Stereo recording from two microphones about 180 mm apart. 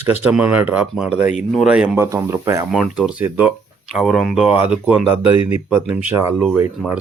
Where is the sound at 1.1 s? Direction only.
40° left (ahead or behind).